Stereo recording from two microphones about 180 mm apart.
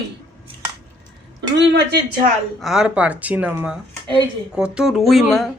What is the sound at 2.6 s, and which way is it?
Speech, centre (ahead or behind).